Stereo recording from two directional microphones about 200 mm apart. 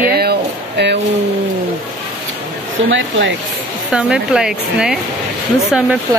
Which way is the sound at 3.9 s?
5° right (ahead or behind).